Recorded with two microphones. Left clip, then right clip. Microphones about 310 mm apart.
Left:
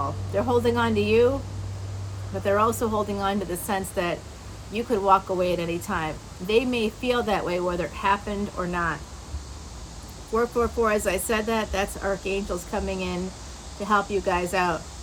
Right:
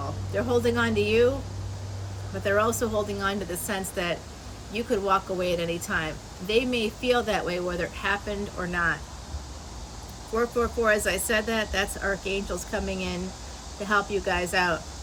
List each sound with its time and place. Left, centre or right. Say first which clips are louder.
0.3 s a woman's voice: left 2 dB; centre
2.4 s a woman's voice: left 2 dB; centre
10.3 s a woman's voice: left 2 dB; centre